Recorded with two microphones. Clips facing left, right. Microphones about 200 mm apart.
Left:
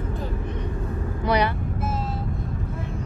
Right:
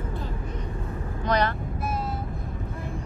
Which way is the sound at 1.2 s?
10° left (ahead or behind).